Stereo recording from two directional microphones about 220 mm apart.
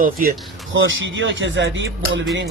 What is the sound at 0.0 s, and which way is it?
Speech, 40° right (ahead or behind).